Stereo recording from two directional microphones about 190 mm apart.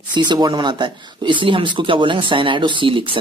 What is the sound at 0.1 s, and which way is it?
A woman's voice, 25° right (ahead or behind).